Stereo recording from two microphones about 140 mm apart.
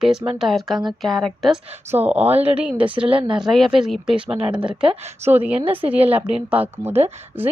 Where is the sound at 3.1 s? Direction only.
40° right (ahead or behind).